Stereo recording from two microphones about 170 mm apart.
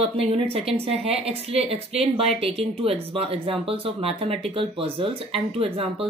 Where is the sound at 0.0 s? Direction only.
35° right (ahead or behind).